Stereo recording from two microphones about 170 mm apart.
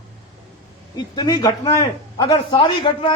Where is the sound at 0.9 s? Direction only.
25° left (ahead or behind).